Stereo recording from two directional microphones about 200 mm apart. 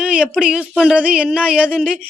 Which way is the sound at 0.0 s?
5° right (ahead or behind).